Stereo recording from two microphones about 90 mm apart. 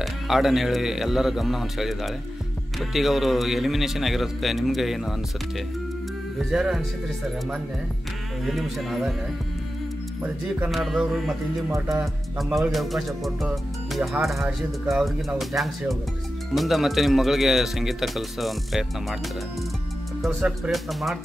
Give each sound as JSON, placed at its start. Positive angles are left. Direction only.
{"t": 0.0, "sound": "speech", "side_deg": -5}
{"t": 6.3, "sound": "speech", "side_deg": -5}
{"t": 8.5, "sound": "speech", "side_deg": 0}
{"t": 10.2, "sound": "speech", "side_deg": -15}
{"t": 10.7, "sound": "speech", "side_deg": -5}
{"t": 11.7, "sound": "music", "side_deg": -35}
{"t": 12.4, "sound": "speech", "side_deg": 0}
{"t": 20.3, "sound": "speech", "side_deg": -10}
{"t": 20.7, "sound": "speech", "side_deg": 0}